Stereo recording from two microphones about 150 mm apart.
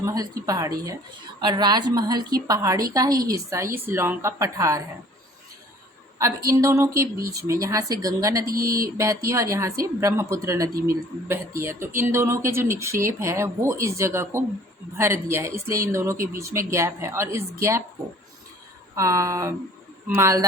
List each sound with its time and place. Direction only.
0.0 s a woman's voice: 25° right (ahead or behind)
6.1 s a woman's voice: 20° right (ahead or behind)
8.4 s speech: 75° right (ahead or behind)
9.0 s a woman's voice: 20° right (ahead or behind)
18.9 s a woman's voice: 20° right (ahead or behind)